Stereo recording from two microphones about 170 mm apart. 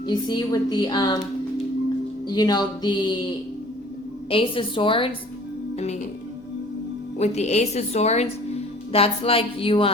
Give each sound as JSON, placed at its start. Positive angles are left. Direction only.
{"t": 0.0, "sound": "speech", "side_deg": 25}
{"t": 2.2, "sound": "speech", "side_deg": 25}
{"t": 4.3, "sound": "a woman's voice", "side_deg": 30}
{"t": 5.7, "sound": "music", "side_deg": 40}
{"t": 7.2, "sound": "a woman's voice", "side_deg": 40}